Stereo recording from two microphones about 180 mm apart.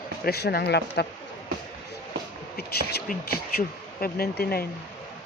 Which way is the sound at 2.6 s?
60° left (ahead or behind).